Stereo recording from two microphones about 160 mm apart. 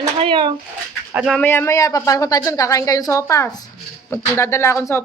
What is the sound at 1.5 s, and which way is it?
A woman's voice, 15° left (ahead or behind).